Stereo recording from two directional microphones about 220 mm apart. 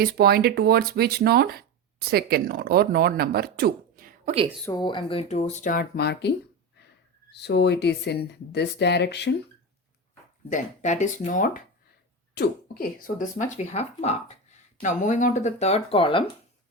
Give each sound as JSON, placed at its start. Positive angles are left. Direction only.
{"t": 0.0, "sound": "speech", "side_deg": -45}
{"t": 4.7, "sound": "speech", "side_deg": 20}
{"t": 7.3, "sound": "speech", "side_deg": 50}
{"t": 10.5, "sound": "speech", "side_deg": 35}